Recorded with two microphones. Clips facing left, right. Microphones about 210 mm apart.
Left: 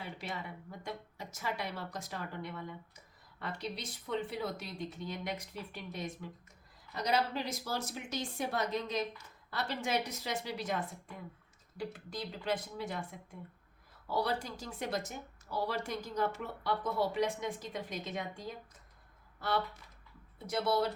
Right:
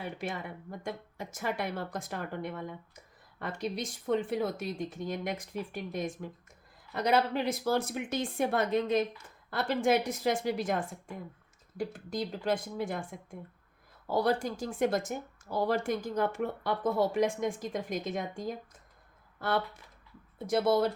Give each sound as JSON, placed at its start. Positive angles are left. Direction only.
{"t": 0.0, "sound": "speech", "side_deg": -50}